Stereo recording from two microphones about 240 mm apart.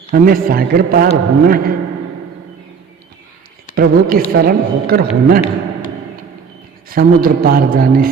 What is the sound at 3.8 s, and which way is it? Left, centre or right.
A man's voice, right.